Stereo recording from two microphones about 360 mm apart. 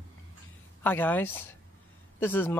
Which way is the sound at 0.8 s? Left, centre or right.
Centre.